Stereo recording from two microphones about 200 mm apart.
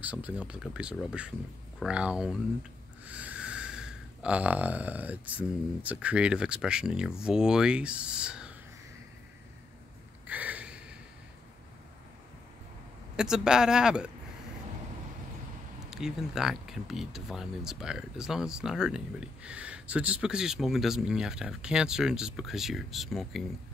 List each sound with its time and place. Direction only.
0.0 s speech: 5° right (ahead or behind)
3.1 s a sound: 5° right (ahead or behind)
7.2 s speech: 5° right (ahead or behind)
10.2 s a sound: 10° right (ahead or behind)
13.1 s speech: 5° right (ahead or behind)
15.8 s speech: centre (ahead or behind)